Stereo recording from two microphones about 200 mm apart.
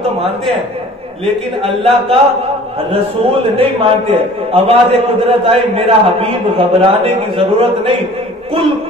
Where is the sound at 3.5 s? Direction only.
30° right (ahead or behind).